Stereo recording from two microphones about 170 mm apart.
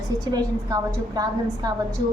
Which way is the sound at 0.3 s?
20° right (ahead or behind).